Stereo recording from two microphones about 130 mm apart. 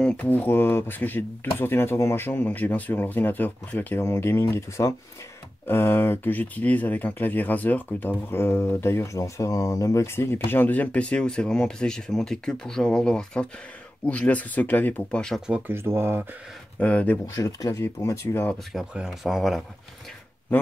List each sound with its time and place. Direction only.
0.0 s speech: 10° left (ahead or behind)
15.4 s speech: 10° right (ahead or behind)
16.8 s speech: 10° left (ahead or behind)
17.3 s speech: 30° left (ahead or behind)
18.7 s speech: centre (ahead or behind)